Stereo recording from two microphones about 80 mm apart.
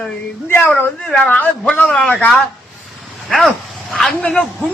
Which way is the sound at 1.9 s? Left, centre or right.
Centre.